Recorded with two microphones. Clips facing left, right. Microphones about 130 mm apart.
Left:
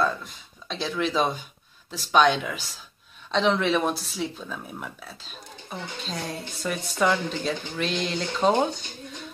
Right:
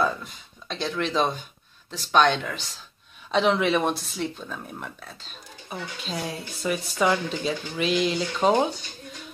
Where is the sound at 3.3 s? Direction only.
5° right (ahead or behind).